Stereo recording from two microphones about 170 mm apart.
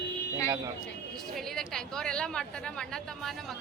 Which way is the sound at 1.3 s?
Centre (ahead or behind).